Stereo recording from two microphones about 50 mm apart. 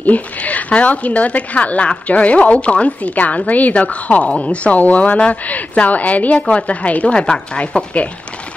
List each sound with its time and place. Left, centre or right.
0.0 s a woman's voice: left